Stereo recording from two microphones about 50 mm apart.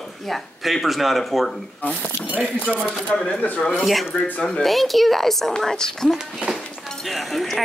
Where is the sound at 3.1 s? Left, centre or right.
Centre.